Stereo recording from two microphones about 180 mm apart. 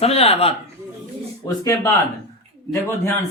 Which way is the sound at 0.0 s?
35° left (ahead or behind).